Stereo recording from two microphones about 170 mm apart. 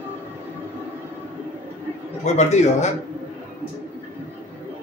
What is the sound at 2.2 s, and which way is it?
Speech, 40° left (ahead or behind).